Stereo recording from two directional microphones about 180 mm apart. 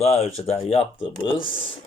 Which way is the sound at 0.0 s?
35° left (ahead or behind).